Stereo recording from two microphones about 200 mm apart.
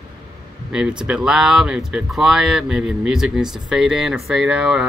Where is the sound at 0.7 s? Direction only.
5° right (ahead or behind).